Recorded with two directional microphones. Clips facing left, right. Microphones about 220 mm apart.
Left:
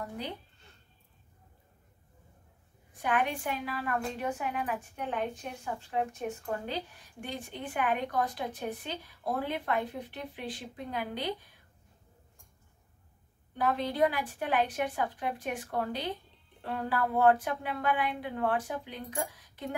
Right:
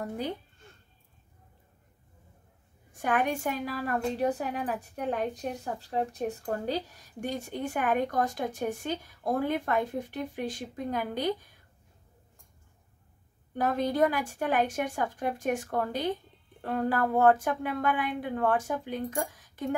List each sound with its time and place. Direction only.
0.0 s speech: 45° right (ahead or behind)
2.9 s a woman's voice: 45° right (ahead or behind)
13.6 s a woman's voice: 45° right (ahead or behind)